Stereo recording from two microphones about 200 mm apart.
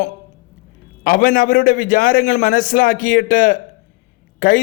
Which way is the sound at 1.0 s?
45° left (ahead or behind).